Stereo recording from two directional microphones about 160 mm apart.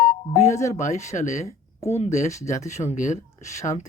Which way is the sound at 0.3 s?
45° left (ahead or behind).